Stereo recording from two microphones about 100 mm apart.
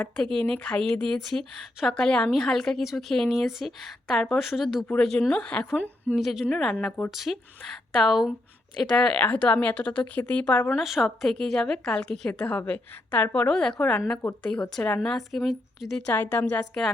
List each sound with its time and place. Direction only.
0.2 s a woman's voice: 5° left (ahead or behind)
6.1 s a woman's voice: centre (ahead or behind)
6.7 s a woman's voice: 15° left (ahead or behind)
7.1 s a woman's voice: centre (ahead or behind); by 10.8 s 15° left (ahead or behind)
10.8 s a woman's voice: centre (ahead or behind)
16.0 s a woman's voice: 15° left (ahead or behind)